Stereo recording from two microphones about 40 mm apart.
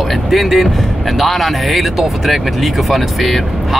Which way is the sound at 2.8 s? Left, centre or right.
Centre.